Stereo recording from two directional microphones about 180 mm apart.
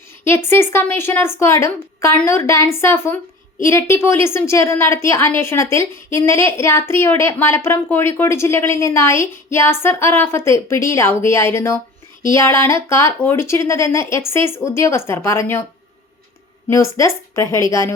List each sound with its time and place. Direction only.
0.4 s a woman's voice: 15° left (ahead or behind)
16.6 s a woman's voice: 15° left (ahead or behind)